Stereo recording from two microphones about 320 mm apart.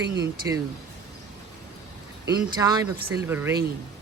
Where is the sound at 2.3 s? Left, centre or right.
Centre.